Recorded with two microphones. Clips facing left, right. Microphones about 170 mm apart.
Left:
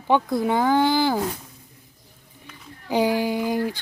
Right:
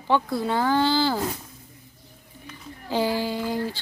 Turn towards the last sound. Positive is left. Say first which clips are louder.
# left 4 dB
turn(degrees=15)  # may be behind; listen again after turning